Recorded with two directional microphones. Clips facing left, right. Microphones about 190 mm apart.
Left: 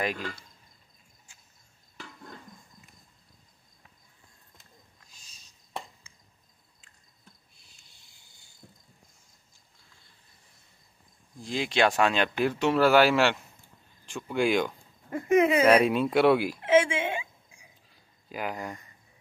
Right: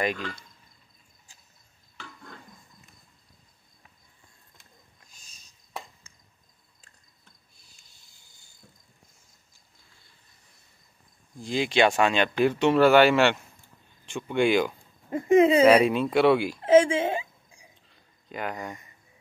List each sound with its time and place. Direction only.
0.0 s speech: 5° left (ahead or behind)
11.4 s speech: centre (ahead or behind)
15.0 s speech: 25° right (ahead or behind)
15.6 s speech: centre (ahead or behind)
16.6 s a sound: 40° right (ahead or behind)
17.8 s a sound: 5° left (ahead or behind)